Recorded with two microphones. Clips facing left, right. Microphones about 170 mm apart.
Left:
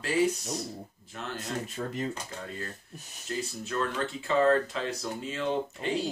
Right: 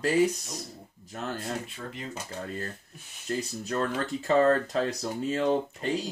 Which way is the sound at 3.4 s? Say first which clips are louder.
Even; 40° right (ahead or behind).